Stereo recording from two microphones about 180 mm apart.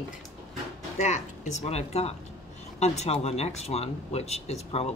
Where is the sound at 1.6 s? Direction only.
35° left (ahead or behind).